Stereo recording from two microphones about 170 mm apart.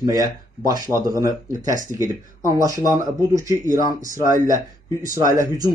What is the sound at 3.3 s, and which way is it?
Speech, 20° right (ahead or behind).